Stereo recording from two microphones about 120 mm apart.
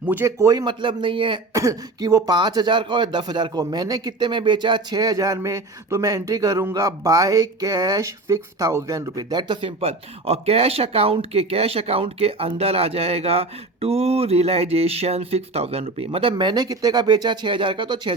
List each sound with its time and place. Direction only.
0.0 s speech: 15° right (ahead or behind)
0.6 s speech: 40° right (ahead or behind)
1.5 s speech: 30° right (ahead or behind)
9.3 s speech: 40° right (ahead or behind)
16.3 s speech: 35° right (ahead or behind)